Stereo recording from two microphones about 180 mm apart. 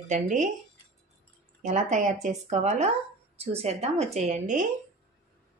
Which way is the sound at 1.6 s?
40° right (ahead or behind).